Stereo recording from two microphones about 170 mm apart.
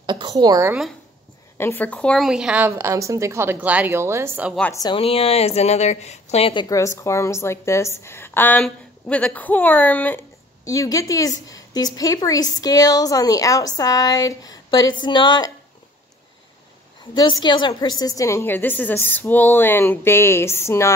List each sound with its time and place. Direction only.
0.0 s a woman's voice: 25° right (ahead or behind)
1.6 s a woman's voice: 10° left (ahead or behind); by 4.6 s 10° right (ahead or behind)
4.7 s a woman's voice: 30° left (ahead or behind)
17.1 s a woman's voice: 25° left (ahead or behind)